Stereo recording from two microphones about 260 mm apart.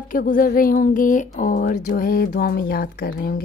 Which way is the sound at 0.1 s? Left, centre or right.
Left.